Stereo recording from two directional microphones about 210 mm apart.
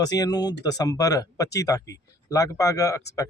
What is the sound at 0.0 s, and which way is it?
Speech, 20° left (ahead or behind).